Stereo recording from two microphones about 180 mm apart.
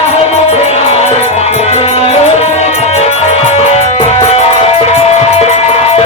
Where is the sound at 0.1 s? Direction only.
35° left (ahead or behind).